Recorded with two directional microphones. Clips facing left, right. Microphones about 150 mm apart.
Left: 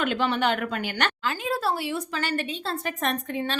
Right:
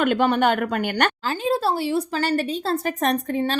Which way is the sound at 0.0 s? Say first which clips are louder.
Right 6 dB; 50° right (ahead or behind).